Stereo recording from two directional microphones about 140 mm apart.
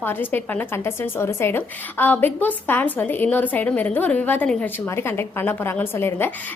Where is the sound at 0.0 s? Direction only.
15° left (ahead or behind).